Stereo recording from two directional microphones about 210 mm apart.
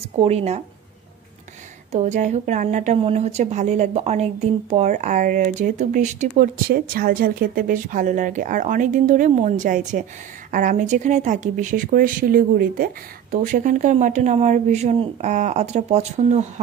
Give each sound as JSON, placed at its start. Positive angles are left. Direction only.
{"t": 0.2, "sound": "a woman's voice", "side_deg": -30}
{"t": 1.9, "sound": "a woman's voice", "side_deg": -35}